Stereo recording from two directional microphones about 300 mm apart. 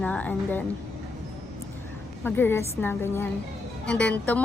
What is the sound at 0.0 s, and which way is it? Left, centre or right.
Speech, centre.